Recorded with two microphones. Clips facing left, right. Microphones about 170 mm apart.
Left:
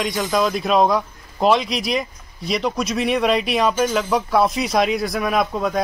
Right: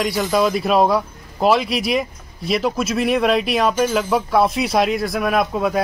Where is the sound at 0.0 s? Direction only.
5° right (ahead or behind).